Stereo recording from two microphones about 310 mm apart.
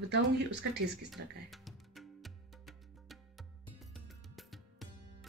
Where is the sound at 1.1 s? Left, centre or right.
Centre.